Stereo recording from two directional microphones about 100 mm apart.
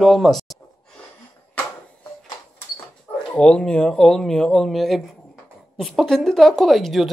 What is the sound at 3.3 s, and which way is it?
A woman's voice, 10° left (ahead or behind).